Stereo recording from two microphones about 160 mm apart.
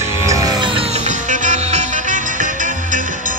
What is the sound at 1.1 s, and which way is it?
Music, 50° right (ahead or behind).